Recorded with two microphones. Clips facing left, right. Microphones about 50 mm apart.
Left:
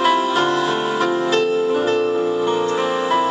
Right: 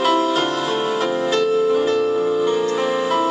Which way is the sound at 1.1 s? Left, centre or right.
Left.